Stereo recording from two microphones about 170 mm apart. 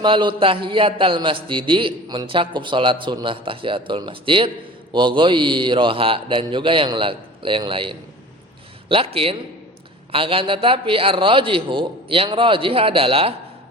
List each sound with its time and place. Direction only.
0.0 s a man's voice: 30° right (ahead or behind)